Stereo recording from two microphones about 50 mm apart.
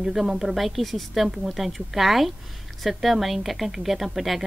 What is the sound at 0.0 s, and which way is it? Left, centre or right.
Speech, centre.